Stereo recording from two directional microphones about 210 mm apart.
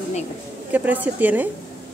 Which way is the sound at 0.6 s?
10° right (ahead or behind).